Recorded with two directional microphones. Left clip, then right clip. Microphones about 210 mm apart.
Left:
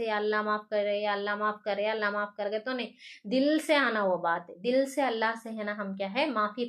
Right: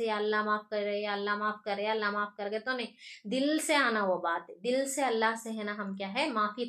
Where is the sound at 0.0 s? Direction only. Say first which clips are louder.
Left 1 dB; 35° left (ahead or behind).